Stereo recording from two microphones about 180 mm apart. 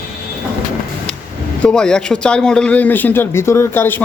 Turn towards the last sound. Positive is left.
turn(degrees=10)  # may be behind; listen again after turning